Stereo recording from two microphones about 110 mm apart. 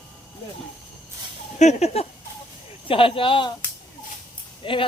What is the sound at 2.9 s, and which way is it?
Speech, 55° left (ahead or behind).